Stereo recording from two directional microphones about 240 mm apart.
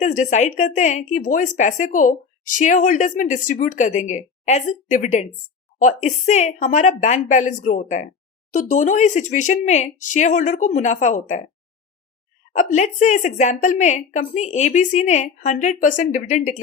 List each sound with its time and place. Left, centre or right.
0.0 s a woman's voice: left
12.5 s speech: left